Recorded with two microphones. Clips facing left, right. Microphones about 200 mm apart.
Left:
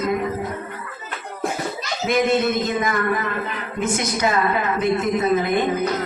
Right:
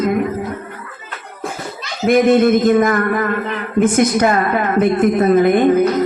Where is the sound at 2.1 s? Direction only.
50° right (ahead or behind).